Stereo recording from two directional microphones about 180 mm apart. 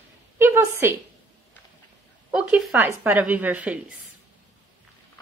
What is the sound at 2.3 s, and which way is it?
A woman's voice, 5° right (ahead or behind).